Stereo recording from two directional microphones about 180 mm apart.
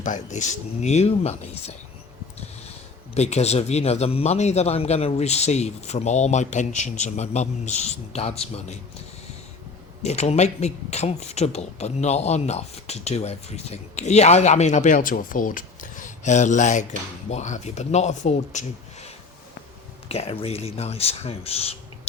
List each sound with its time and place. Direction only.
0.0 s speech: 45° left (ahead or behind)
3.2 s speech: 35° left (ahead or behind)
10.0 s speech: 35° left (ahead or behind)